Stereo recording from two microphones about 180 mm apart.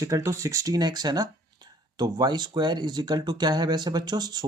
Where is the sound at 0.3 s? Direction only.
15° right (ahead or behind).